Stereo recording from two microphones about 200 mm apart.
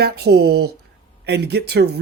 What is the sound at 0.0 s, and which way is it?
Speech, 55° right (ahead or behind).